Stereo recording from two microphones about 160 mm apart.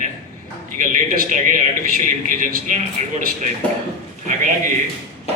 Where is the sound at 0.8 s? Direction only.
55° right (ahead or behind).